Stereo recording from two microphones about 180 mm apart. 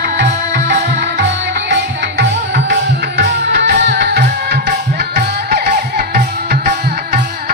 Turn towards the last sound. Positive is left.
turn(degrees=-55)  # may be behind; listen again after turning